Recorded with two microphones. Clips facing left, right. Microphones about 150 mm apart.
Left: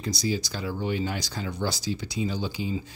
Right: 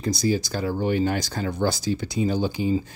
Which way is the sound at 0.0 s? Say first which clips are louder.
Right 5 dB; 50° right (ahead or behind).